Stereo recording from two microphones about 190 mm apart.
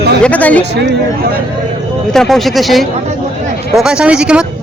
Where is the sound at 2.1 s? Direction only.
Centre (ahead or behind).